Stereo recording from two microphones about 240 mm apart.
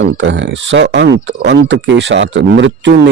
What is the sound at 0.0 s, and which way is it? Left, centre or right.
Speech, right.